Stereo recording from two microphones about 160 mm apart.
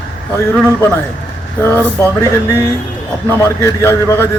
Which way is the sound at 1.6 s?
15° left (ahead or behind).